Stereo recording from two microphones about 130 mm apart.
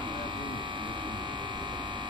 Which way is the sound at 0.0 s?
40° right (ahead or behind).